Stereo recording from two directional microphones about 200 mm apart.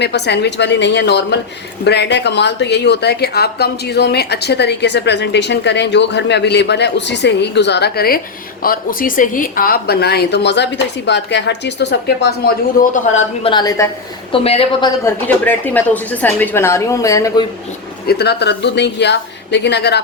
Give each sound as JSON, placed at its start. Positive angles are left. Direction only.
{"t": 0.0, "sound": "a woman's voice", "side_deg": 55}
{"t": 13.4, "sound": "a woman's voice", "side_deg": 20}
{"t": 14.4, "sound": "a woman's voice", "side_deg": 30}
{"t": 15.0, "sound": "a woman's voice", "side_deg": 10}
{"t": 18.0, "sound": "a woman's voice", "side_deg": 50}